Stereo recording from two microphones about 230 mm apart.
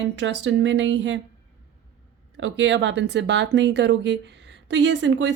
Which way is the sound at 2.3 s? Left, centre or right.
Right.